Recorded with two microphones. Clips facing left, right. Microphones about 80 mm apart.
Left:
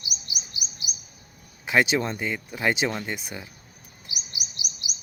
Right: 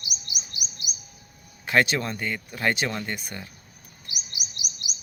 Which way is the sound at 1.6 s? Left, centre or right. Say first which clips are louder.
Left 1 dB; centre.